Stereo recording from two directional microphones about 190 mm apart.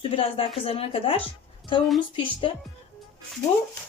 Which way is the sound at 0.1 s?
30° left (ahead or behind).